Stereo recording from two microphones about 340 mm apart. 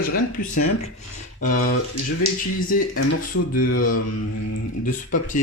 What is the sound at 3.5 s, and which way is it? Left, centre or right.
Speech, left.